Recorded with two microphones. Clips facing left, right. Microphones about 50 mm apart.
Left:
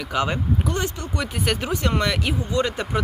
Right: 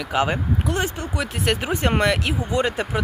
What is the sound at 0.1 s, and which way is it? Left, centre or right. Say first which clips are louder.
Speech: right 2 dB; centre.